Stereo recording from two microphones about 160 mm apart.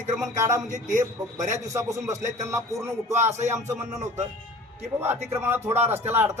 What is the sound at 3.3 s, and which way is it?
Speech, 45° right (ahead or behind).